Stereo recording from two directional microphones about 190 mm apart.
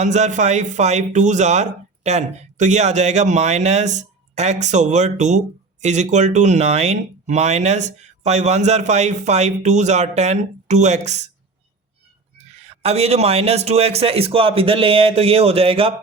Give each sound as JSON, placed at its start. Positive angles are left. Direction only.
{"t": 0.0, "sound": "speech", "side_deg": -40}
{"t": 12.4, "sound": "speech", "side_deg": -35}